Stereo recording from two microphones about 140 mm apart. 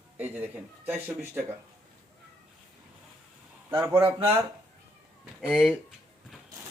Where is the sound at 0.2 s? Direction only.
10° right (ahead or behind).